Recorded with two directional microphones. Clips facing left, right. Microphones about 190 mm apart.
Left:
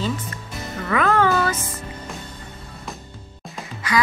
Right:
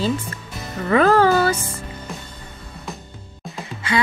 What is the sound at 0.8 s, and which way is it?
Speech, 35° right (ahead or behind).